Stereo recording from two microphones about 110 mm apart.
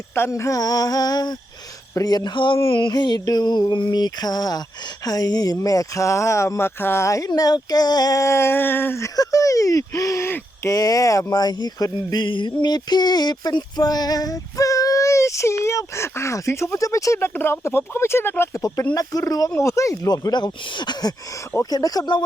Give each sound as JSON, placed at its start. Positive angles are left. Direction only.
{"t": 0.1, "sound": "speech", "side_deg": 25}
{"t": 10.7, "sound": "speech", "side_deg": 35}
{"t": 18.9, "sound": "speech", "side_deg": 30}